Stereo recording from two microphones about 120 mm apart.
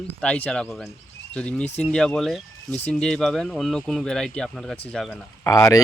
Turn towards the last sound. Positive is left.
turn(degrees=30)  # may be behind; listen again after turning